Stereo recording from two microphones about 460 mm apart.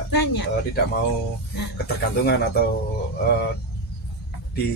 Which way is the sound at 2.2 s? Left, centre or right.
Left.